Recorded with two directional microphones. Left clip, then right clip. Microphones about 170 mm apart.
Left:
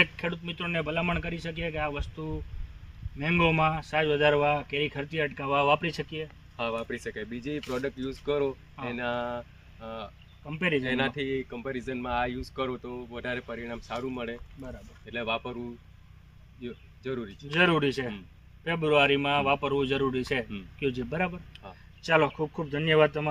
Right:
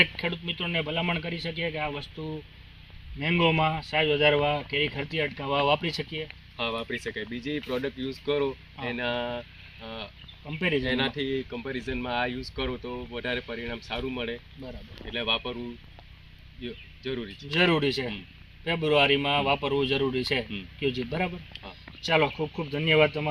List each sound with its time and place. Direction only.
0.0 s speech: 5° right (ahead or behind)
6.6 s speech: 20° left (ahead or behind)
10.4 s speech: 5° right (ahead or behind)
10.8 s speech: 20° left (ahead or behind)
17.5 s speech: 10° right (ahead or behind)